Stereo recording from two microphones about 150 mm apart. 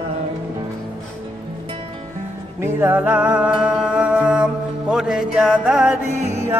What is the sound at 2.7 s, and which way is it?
Music, 15° right (ahead or behind).